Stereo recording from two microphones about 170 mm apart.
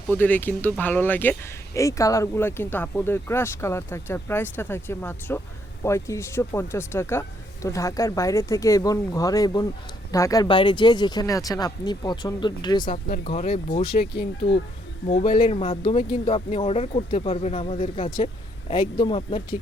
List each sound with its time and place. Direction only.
0.1 s speech: 10° left (ahead or behind); by 19.5 s 30° left (ahead or behind)